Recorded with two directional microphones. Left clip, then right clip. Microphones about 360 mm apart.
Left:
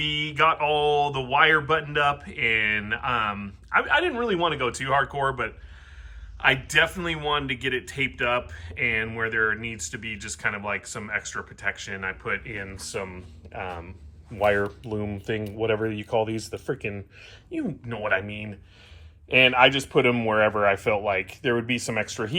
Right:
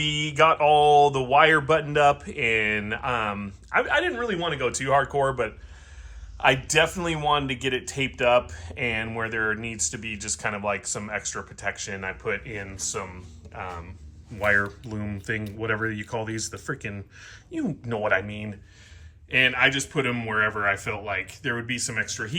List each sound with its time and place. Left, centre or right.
0.0 s a man's voice: centre